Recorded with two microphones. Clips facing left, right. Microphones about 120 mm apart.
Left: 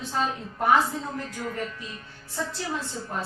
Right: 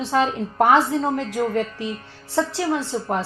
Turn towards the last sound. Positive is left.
turn(degrees=-90)